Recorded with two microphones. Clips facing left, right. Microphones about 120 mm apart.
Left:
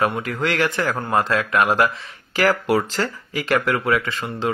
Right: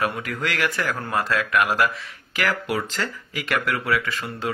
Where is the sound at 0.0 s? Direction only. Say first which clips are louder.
Left 4 dB; 25° left (ahead or behind).